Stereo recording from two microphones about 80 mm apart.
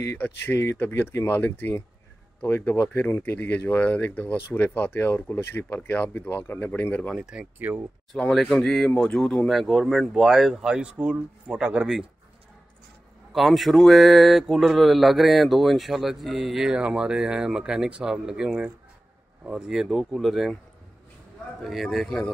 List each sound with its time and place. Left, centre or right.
0.2 s speech: left
7.2 s speech: centre
7.5 s speech: right
8.2 s speech: centre
13.3 s speech: centre
19.9 s speech: centre
21.6 s speech: centre